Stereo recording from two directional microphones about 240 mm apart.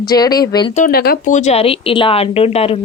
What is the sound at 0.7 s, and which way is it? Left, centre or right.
Speech, left.